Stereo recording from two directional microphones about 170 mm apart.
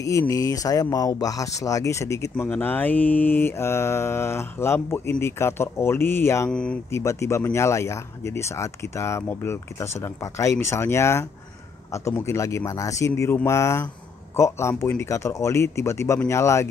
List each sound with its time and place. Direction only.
0.0 s speech: 20° left (ahead or behind)